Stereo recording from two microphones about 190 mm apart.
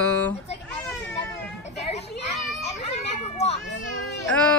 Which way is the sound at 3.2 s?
35° left (ahead or behind).